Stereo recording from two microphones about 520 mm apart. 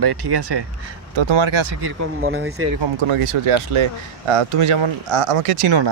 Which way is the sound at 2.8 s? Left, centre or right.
Right.